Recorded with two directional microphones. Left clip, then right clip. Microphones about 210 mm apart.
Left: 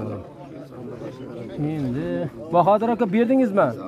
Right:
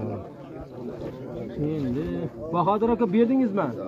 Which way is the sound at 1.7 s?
55° left (ahead or behind).